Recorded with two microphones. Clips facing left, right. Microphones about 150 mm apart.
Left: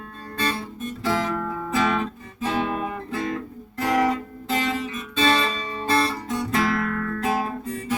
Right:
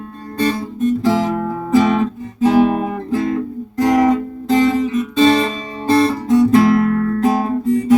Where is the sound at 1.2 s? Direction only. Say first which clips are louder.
Right 7 dB; 35° right (ahead or behind).